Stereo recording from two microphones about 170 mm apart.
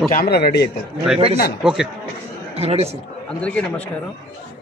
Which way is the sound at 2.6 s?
35° right (ahead or behind).